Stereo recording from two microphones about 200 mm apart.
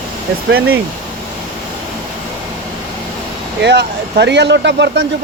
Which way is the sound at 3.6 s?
60° right (ahead or behind).